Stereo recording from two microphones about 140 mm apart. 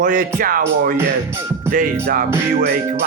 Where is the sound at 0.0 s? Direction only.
65° right (ahead or behind); by 0.9 s 85° right.